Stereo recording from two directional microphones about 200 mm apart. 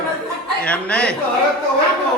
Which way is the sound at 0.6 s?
5° left (ahead or behind).